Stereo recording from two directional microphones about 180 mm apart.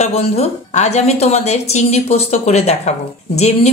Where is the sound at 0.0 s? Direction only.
35° left (ahead or behind).